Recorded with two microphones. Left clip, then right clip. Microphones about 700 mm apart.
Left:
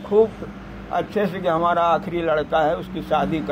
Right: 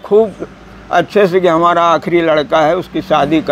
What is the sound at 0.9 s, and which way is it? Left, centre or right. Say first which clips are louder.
A man's voice: right 12 dB; right.